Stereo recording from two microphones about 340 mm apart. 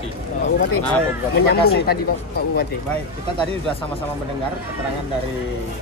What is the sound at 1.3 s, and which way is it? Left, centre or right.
Speech, left.